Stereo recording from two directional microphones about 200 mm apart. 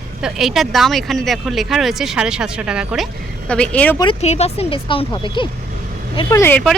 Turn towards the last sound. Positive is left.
turn(degrees=5)  # may be behind; listen again after turning